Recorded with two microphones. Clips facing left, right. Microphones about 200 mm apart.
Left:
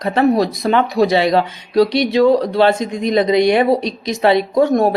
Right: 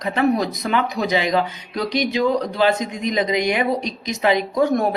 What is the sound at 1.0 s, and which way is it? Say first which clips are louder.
Speech: left 9 dB; 80° left.